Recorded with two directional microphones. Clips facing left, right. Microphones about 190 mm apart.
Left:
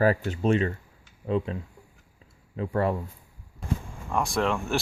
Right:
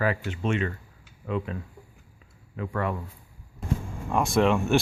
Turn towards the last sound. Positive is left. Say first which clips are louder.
# right 4 dB
turn(degrees=-15)  # may be behind; listen again after turning